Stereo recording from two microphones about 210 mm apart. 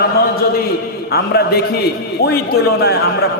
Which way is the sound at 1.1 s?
50° left (ahead or behind).